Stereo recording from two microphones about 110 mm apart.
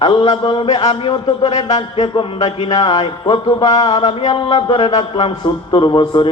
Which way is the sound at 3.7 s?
65° left (ahead or behind).